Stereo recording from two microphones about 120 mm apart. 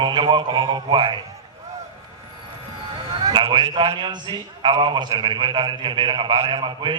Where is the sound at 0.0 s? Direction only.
40° right (ahead or behind).